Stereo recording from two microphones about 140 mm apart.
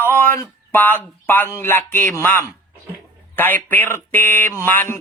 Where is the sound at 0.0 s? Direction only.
15° left (ahead or behind).